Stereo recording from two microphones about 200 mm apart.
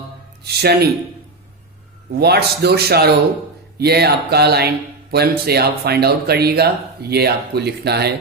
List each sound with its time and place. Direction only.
0.4 s speech: 55° right (ahead or behind)
2.0 s speech: 55° right (ahead or behind)